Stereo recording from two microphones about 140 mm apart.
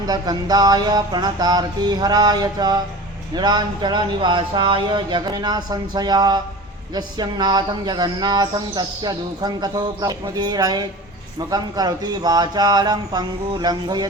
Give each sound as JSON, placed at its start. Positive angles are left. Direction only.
{"t": 0.0, "sound": "speech", "side_deg": -25}